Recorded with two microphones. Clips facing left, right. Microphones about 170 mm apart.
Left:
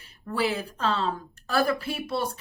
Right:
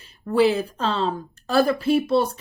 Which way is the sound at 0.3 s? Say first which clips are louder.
Right 9 dB; 25° right (ahead or behind).